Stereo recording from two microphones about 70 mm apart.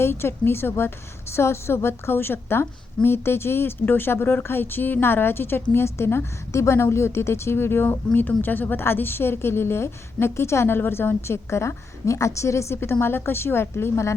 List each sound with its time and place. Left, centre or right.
0.0 s speech: left